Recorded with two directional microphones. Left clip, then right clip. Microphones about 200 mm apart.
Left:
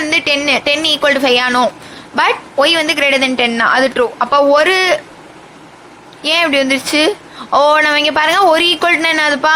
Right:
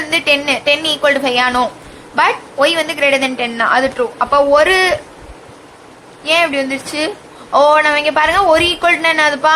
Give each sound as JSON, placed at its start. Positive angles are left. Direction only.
{"t": 0.1, "sound": "a woman's voice", "side_deg": 25}
{"t": 6.2, "sound": "a woman's voice", "side_deg": 25}